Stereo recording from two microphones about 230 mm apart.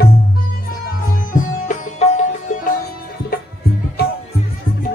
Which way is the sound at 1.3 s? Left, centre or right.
Left.